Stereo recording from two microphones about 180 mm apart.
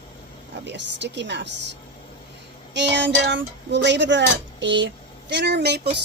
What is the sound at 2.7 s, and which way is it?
Speech, 80° right.